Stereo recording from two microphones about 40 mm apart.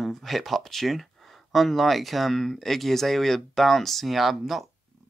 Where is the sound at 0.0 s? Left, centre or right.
Centre.